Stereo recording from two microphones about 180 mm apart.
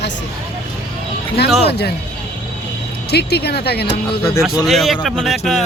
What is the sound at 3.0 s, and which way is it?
Speech, 65° left (ahead or behind).